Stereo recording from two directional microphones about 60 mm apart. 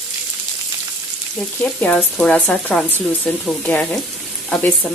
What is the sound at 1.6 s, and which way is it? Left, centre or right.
Speech, centre.